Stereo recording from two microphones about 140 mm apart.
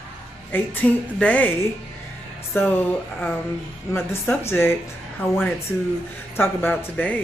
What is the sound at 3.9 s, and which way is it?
Speech, 15° left (ahead or behind).